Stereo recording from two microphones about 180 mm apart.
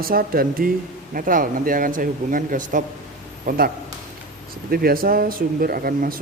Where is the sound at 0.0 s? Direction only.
55° right (ahead or behind).